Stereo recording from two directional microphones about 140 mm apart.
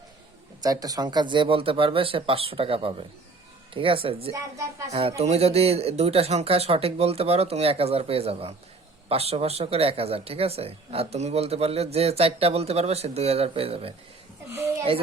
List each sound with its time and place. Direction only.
0.6 s speech: 25° right (ahead or behind)
4.3 s speech: 20° right (ahead or behind)
4.9 s speech: 50° right (ahead or behind)